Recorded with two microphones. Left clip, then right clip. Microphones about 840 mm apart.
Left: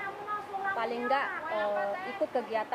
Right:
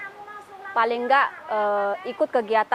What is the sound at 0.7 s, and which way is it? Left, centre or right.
Speech, right.